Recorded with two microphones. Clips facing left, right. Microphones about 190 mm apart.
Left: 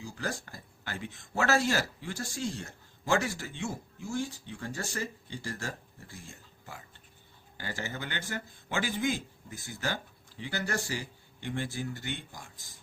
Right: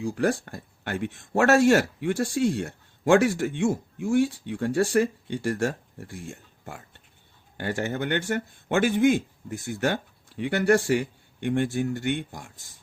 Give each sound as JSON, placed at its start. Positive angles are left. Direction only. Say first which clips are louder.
{"t": 0.0, "sound": "speech", "louder": "right 12 dB", "side_deg": -70}